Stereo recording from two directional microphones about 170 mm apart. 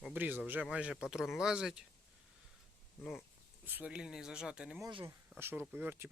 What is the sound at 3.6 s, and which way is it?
Speech, 10° right (ahead or behind).